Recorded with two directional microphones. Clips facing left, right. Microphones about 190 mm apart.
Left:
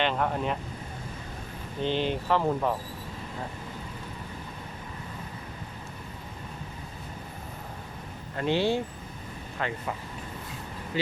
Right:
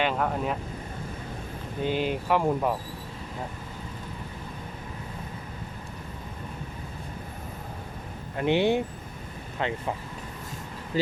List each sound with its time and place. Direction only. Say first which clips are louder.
0.0 s speech: right 1 dB; 5° right (ahead or behind)
1.8 s speech: right 1 dB; 10° right (ahead or behind)
8.4 s speech: right 3 dB; 20° right (ahead or behind)
10.9 s speech: right 3 dB; 40° right (ahead or behind)